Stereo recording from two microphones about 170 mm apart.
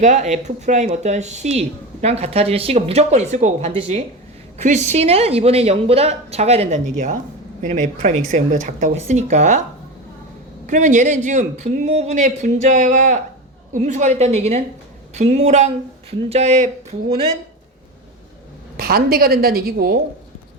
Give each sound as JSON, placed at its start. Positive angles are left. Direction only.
{"t": 0.0, "sound": "a woman's voice", "side_deg": -45}
{"t": 10.7, "sound": "a woman's voice", "side_deg": -45}
{"t": 18.8, "sound": "a woman's voice", "side_deg": -65}